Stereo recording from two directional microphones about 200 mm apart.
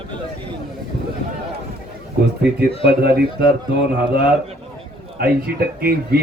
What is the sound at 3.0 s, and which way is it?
Speech, 50° right (ahead or behind).